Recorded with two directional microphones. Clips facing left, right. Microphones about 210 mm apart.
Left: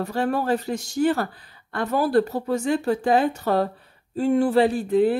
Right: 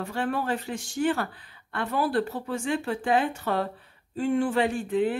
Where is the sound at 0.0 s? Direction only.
40° left (ahead or behind).